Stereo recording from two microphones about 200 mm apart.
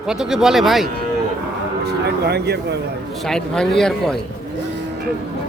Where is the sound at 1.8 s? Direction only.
55° right (ahead or behind).